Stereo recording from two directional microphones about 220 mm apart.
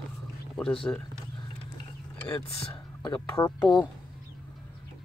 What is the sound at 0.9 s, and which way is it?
Speech, 10° left (ahead or behind).